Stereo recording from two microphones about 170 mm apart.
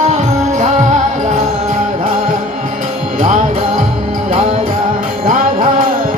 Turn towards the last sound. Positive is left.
turn(degrees=-55)  # may be behind; listen again after turning